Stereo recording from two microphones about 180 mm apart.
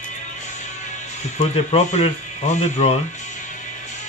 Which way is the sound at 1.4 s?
35° left (ahead or behind).